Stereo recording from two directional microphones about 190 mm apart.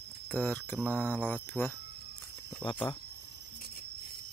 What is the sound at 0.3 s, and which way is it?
Speech, 5° left (ahead or behind).